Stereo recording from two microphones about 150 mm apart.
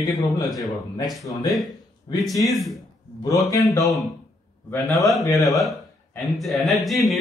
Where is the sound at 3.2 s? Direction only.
25° left (ahead or behind).